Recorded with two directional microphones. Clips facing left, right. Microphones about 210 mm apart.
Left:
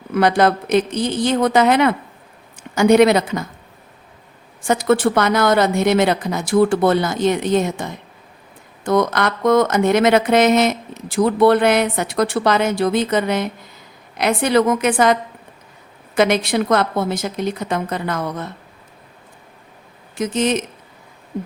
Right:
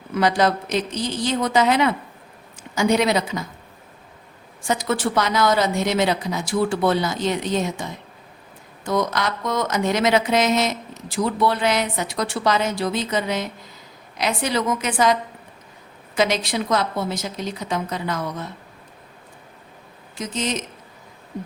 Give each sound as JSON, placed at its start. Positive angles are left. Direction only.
{"t": 0.1, "sound": "speech", "side_deg": 55}
{"t": 4.6, "sound": "speech", "side_deg": 55}
{"t": 20.1, "sound": "speech", "side_deg": 55}